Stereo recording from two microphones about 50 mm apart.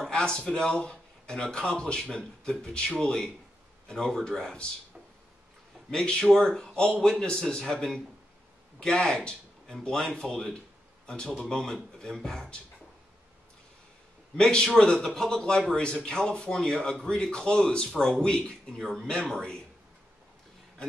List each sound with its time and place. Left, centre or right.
0.1 s a man's voice: centre
5.9 s a man's voice: centre
14.3 s a man's voice: centre